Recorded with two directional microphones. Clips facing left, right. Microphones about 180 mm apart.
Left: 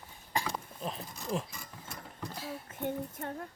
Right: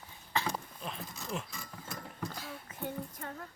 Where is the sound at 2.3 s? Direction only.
25° left (ahead or behind).